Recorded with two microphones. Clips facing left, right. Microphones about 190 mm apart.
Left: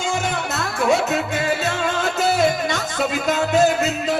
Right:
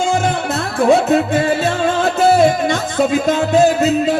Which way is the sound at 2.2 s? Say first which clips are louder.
Right 7 dB; 55° right (ahead or behind).